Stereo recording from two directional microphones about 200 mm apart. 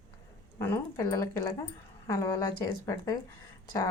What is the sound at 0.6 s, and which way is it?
A woman's voice, 15° left (ahead or behind).